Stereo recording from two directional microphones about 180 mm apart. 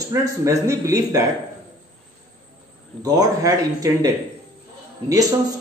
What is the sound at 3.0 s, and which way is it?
Speech, 20° right (ahead or behind).